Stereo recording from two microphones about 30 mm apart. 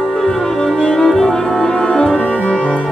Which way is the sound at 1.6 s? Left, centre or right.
Left.